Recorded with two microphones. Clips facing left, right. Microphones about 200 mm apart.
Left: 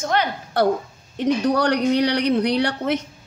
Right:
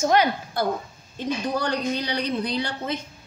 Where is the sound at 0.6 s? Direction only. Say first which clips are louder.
Left 11 dB; 75° left (ahead or behind).